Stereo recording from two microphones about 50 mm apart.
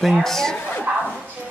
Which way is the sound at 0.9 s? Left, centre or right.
Right.